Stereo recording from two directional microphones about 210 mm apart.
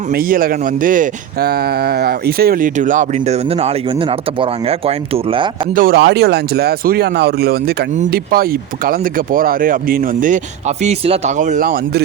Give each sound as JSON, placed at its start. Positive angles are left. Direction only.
{"t": 0.1, "sound": "speech", "side_deg": -45}
{"t": 5.7, "sound": "speech", "side_deg": -45}